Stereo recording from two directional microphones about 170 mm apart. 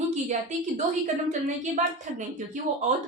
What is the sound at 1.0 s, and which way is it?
A woman's voice, 45° right (ahead or behind).